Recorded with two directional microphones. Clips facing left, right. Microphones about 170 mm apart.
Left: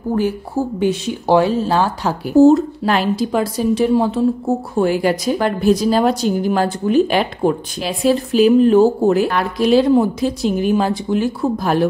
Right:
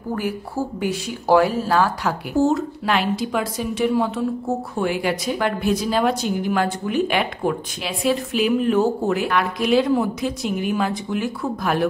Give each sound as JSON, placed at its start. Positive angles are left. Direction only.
{"t": 0.7, "sound": "speech", "side_deg": 25}